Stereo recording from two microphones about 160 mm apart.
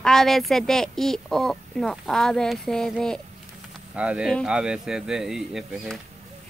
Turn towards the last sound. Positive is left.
turn(degrees=0)  # may be behind; listen again after turning